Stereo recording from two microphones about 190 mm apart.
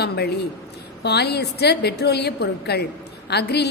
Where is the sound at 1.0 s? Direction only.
60° left (ahead or behind).